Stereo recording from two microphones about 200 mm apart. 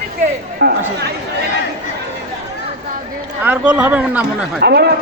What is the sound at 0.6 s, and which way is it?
Speech, 55° right (ahead or behind).